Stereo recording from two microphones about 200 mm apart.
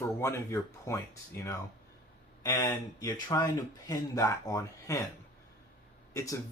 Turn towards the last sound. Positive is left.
turn(degrees=15)  # may be behind; listen again after turning